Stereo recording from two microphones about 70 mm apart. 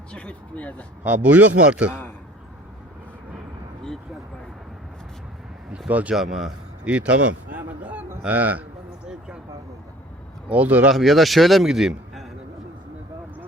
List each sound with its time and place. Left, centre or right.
0.1 s speech: centre
1.0 s a man's voice: right
5.9 s a man's voice: right
6.1 s a man's voice: centre
6.8 s a man's voice: centre
10.5 s a man's voice: right
10.9 s a man's voice: centre